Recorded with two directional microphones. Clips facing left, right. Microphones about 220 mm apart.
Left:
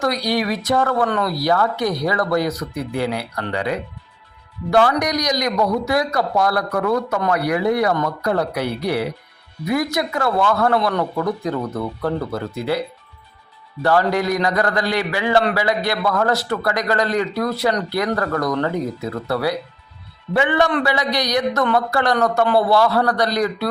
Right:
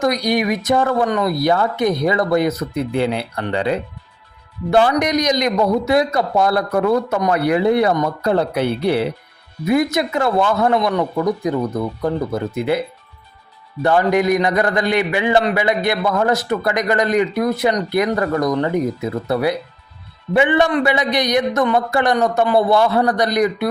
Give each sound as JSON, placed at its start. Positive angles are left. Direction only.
{"t": 0.0, "sound": "speech", "side_deg": -20}
{"t": 13.8, "sound": "speech", "side_deg": -20}